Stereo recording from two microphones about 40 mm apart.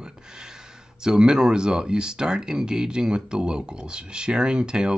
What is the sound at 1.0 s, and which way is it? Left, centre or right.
Speech, centre.